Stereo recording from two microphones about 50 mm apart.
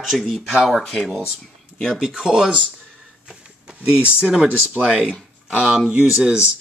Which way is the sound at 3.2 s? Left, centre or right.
Centre.